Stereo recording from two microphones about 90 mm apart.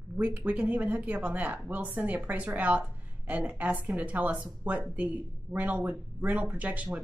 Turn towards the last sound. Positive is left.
turn(degrees=-15)  # may be behind; listen again after turning